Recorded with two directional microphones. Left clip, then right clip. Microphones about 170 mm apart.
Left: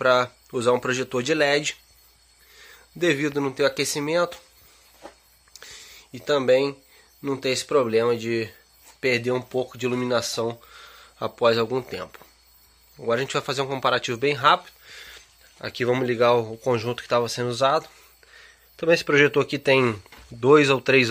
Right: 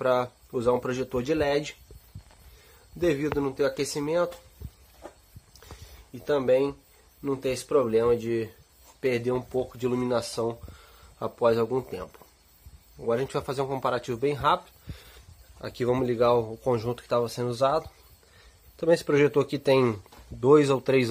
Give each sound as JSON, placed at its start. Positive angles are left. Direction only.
{"t": 0.0, "sound": "speech", "side_deg": 10}
{"t": 3.0, "sound": "speech", "side_deg": 25}
{"t": 6.1, "sound": "speech", "side_deg": 20}